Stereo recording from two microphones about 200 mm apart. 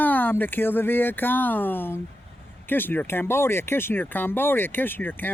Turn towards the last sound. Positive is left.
turn(degrees=10)  # may be behind; listen again after turning